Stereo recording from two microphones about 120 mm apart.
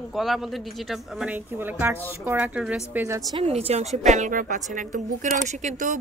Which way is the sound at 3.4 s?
60° right (ahead or behind).